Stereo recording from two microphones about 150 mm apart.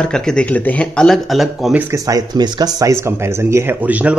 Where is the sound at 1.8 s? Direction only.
20° right (ahead or behind).